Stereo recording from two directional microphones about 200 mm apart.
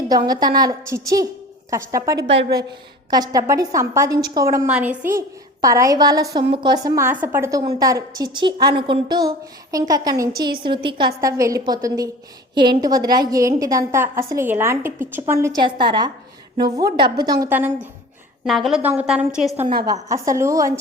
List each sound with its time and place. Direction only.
0.3 s a woman's voice: 20° right (ahead or behind)
2.3 s a woman's voice: 65° right (ahead or behind)
3.1 s a woman's voice: 20° right (ahead or behind)
18.4 s a woman's voice: centre (ahead or behind)
19.8 s a woman's voice: 15° right (ahead or behind)